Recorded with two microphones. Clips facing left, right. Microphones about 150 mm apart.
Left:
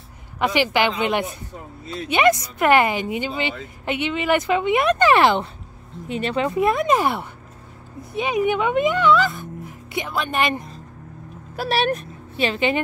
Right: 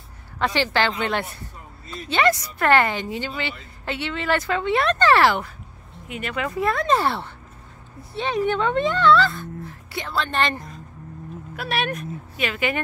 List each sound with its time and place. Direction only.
0.4 s a woman's voice: 15° left (ahead or behind)
11.5 s a woman's voice: 35° left (ahead or behind)